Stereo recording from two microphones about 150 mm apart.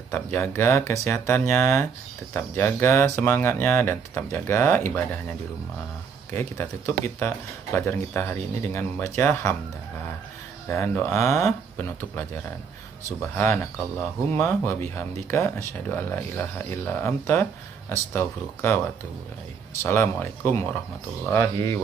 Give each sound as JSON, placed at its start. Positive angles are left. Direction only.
{"t": 0.1, "sound": "speech", "side_deg": 15}
{"t": 6.3, "sound": "speech", "side_deg": 15}
{"t": 10.7, "sound": "speech", "side_deg": 15}
{"t": 19.8, "sound": "speech", "side_deg": 15}